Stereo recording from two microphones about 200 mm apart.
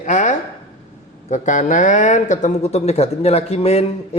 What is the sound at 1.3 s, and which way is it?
Speech, 35° left (ahead or behind).